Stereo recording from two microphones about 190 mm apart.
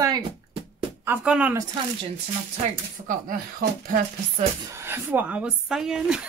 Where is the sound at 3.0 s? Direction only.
50° right (ahead or behind).